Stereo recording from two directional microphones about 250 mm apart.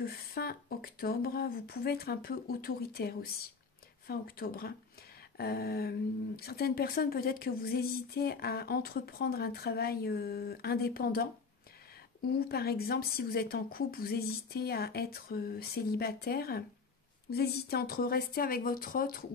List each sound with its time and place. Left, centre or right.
0.0 s speech: left